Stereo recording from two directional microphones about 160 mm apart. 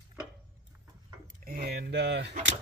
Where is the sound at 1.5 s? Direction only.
65° right (ahead or behind); by 2.4 s 90° right.